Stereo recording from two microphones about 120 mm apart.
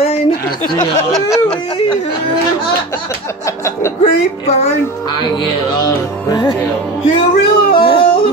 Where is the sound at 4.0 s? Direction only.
60° left (ahead or behind).